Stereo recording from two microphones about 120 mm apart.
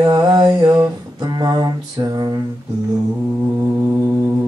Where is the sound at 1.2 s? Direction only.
35° right (ahead or behind).